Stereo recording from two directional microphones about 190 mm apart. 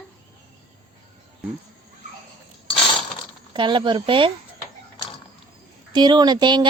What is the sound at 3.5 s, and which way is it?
Speech, 25° right (ahead or behind).